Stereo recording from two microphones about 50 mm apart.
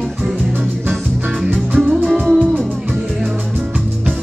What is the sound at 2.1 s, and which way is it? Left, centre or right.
Music, centre.